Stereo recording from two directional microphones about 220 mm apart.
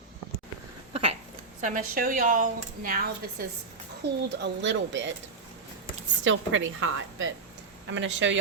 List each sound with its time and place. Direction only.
1.6 s speech: 40° right (ahead or behind); by 5.1 s 55° right (ahead or behind)
6.2 s speech: 60° right (ahead or behind)